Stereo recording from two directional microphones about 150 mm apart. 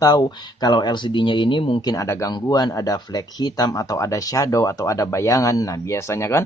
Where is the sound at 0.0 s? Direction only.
25° left (ahead or behind).